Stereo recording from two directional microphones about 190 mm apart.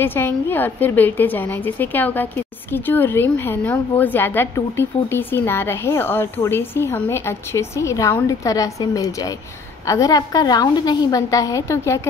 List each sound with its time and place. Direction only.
0.0 s a woman's voice: 10° left (ahead or behind)